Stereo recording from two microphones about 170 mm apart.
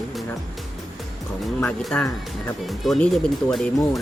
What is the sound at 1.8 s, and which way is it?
Speech, 5° left (ahead or behind).